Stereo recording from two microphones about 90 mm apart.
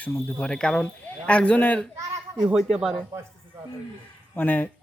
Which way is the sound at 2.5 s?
5° right (ahead or behind).